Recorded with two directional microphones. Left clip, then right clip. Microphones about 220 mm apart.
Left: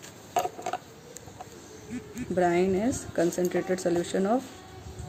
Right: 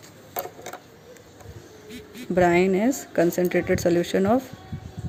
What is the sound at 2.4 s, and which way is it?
Speech, 35° right (ahead or behind).